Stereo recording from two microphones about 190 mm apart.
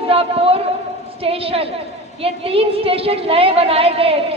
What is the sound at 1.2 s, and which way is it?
A woman's voice, 30° right (ahead or behind).